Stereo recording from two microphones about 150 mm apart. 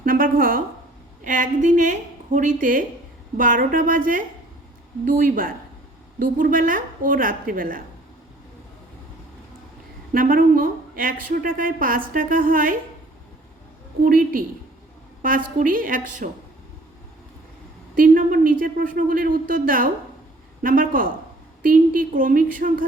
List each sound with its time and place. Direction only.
0.0 s a sound: 70° right (ahead or behind)
1.2 s a woman's voice: 60° right (ahead or behind)
10.1 s speech: 65° right (ahead or behind)
14.0 s speech: 70° right (ahead or behind)
15.5 s a woman's voice: 65° right (ahead or behind)
17.9 s speech: 65° right (ahead or behind)